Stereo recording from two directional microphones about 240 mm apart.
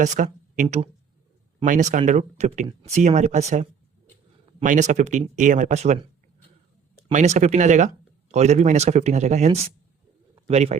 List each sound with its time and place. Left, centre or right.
0.0 s speech: right
7.1 s speech: right
10.3 s bird: right